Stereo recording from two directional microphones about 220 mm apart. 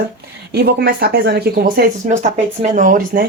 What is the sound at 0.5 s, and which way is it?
Speech, 45° right (ahead or behind).